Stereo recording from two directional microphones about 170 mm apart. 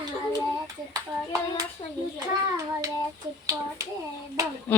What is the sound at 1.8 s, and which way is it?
Speech, 25° left (ahead or behind).